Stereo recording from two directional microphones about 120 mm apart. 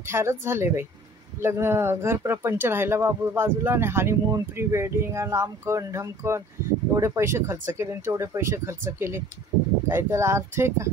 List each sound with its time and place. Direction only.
0.0 s speech: 20° right (ahead or behind)